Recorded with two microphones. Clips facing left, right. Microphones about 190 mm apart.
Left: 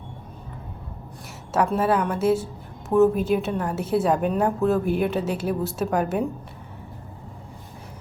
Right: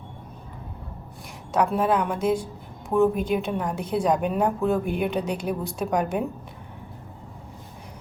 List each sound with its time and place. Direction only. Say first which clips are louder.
1.5 s a woman's voice: left 1 dB; 5° left (ahead or behind)